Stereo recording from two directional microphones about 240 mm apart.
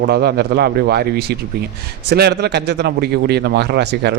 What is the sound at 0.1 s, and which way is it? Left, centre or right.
A man's voice, right.